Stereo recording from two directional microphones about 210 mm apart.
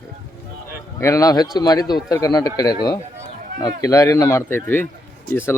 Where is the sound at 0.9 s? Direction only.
15° left (ahead or behind).